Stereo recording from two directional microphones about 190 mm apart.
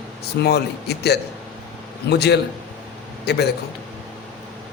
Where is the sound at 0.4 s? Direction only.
60° left (ahead or behind).